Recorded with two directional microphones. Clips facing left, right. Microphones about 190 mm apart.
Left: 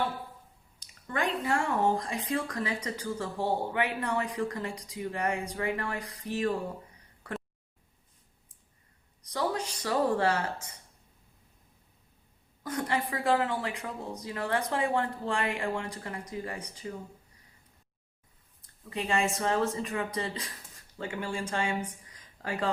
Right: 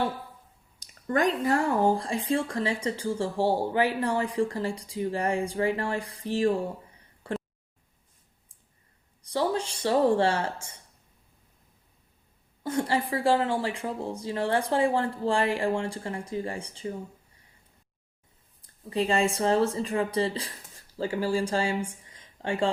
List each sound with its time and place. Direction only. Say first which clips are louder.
0.8 s speech: right 7 dB; 45° right (ahead or behind)
7.2 s a sound: right 6 dB; 30° right (ahead or behind)
9.2 s speech: right 4 dB; 30° right (ahead or behind)
12.6 s speech: right 4 dB; 30° right (ahead or behind)
18.6 s speech: right 8 dB; 35° right (ahead or behind)